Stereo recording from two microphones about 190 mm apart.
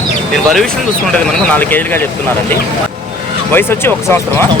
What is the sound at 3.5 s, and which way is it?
Speech, 10° left (ahead or behind).